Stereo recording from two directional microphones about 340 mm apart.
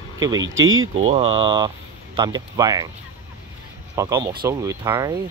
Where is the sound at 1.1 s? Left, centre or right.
Centre.